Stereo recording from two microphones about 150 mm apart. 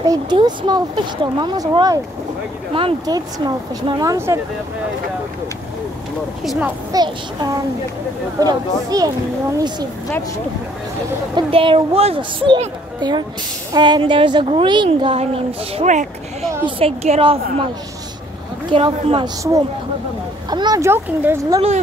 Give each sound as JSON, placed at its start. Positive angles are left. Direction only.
{"t": 0.0, "sound": "speech", "side_deg": -25}
{"t": 6.9, "sound": "speech", "side_deg": -25}
{"t": 11.3, "sound": "a woman's voice", "side_deg": -35}
{"t": 16.6, "sound": "a woman's voice", "side_deg": -40}
{"t": 18.7, "sound": "a woman's voice", "side_deg": -35}
{"t": 20.4, "sound": "speech", "side_deg": -30}